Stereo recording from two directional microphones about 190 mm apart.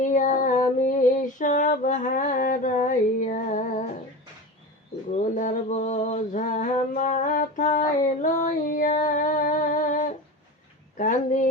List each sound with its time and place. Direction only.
0.0 s female singing: 40° left (ahead or behind)
5.1 s a sound: 40° left (ahead or behind)
10.9 s speech: 45° left (ahead or behind)